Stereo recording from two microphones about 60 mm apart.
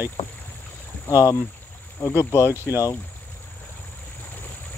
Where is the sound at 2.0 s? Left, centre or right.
Left.